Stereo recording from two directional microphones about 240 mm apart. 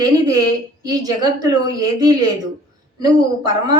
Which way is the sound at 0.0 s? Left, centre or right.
Centre.